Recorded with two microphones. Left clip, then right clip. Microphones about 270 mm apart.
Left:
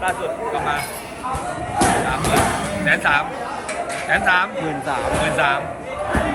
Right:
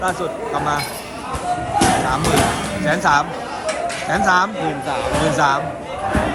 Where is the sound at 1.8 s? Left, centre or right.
Centre.